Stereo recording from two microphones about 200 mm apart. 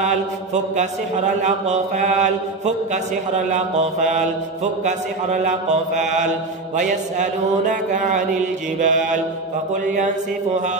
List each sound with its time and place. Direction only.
0.7 s speech: 35° right (ahead or behind)